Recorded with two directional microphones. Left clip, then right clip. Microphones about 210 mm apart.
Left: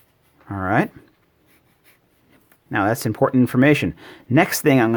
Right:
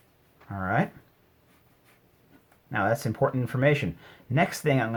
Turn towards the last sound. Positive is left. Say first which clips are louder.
# left 8 dB
turn(degrees=50)  # may be behind; listen again after turning